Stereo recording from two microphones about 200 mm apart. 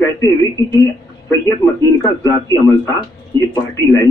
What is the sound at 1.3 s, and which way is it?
A man's voice, 15° left (ahead or behind).